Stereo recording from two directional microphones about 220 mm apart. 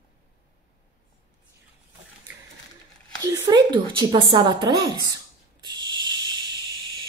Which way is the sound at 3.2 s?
15° right (ahead or behind).